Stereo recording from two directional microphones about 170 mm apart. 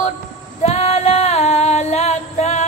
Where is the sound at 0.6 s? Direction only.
40° left (ahead or behind).